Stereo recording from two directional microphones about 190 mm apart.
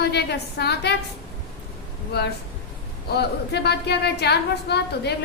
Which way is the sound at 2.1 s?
60° left (ahead or behind).